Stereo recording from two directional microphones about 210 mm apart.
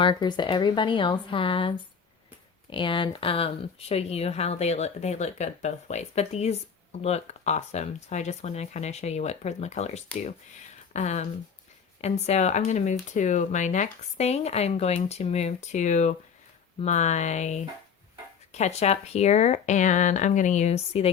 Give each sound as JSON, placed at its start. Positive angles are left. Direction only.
{"t": 0.0, "sound": "speech", "side_deg": 20}